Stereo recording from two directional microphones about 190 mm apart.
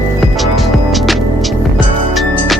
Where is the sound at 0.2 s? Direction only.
Centre (ahead or behind).